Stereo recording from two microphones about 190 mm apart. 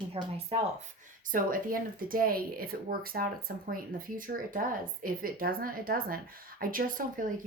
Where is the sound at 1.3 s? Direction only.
45° right (ahead or behind).